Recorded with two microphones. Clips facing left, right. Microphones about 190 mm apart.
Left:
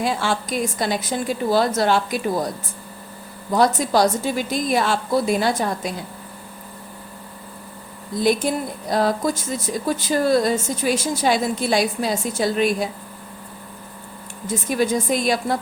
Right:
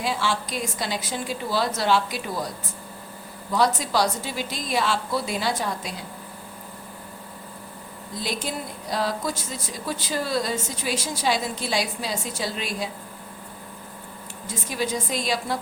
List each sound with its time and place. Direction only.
0.0 s a woman's voice: 50° left (ahead or behind)
3.5 s a woman's voice: 50° left (ahead or behind)
8.2 s a woman's voice: 50° left (ahead or behind)
14.4 s a woman's voice: 50° left (ahead or behind)